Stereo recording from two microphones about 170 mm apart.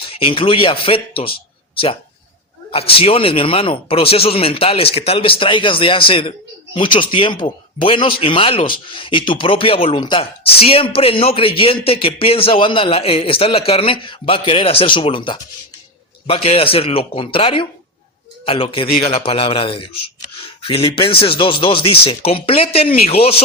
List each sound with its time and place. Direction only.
0.0 s speech: 35° left (ahead or behind)
2.7 s speech: 35° left (ahead or behind)